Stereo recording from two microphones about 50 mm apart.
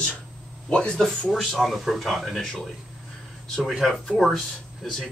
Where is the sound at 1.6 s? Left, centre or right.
Centre.